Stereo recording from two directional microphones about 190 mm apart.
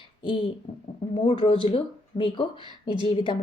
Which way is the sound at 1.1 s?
30° left (ahead or behind).